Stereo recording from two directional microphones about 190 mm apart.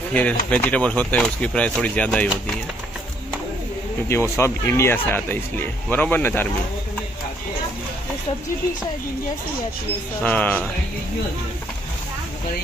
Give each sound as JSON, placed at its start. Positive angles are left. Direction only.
{"t": 0.1, "sound": "speech", "side_deg": 10}
{"t": 4.1, "sound": "speech", "side_deg": 15}
{"t": 10.2, "sound": "speech", "side_deg": 10}